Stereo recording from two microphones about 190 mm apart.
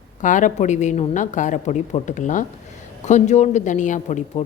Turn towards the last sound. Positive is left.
turn(degrees=40)  # may be behind; listen again after turning